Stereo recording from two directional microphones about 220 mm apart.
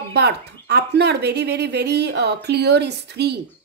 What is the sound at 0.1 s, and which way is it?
Speech, 50° right (ahead or behind).